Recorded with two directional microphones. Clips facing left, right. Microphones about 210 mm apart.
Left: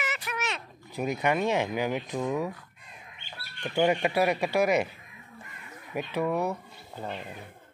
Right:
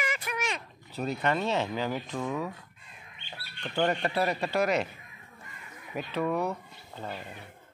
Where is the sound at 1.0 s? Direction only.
15° left (ahead or behind).